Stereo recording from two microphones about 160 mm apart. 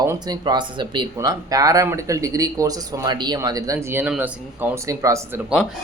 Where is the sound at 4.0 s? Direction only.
10° right (ahead or behind).